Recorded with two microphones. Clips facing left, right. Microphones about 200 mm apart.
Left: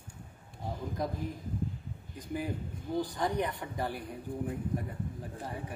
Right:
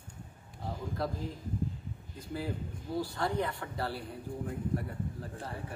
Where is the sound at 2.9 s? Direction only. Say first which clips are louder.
Left 1 dB; 15° left (ahead or behind).